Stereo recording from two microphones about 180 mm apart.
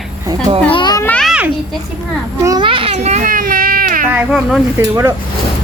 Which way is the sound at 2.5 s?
25° right (ahead or behind).